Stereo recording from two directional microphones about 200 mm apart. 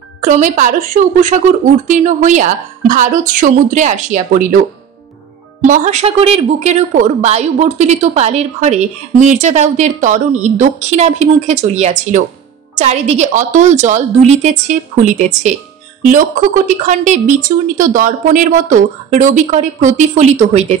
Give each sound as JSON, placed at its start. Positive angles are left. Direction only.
{"t": 0.2, "sound": "a woman's voice", "side_deg": -40}
{"t": 5.7, "sound": "a woman's voice", "side_deg": -35}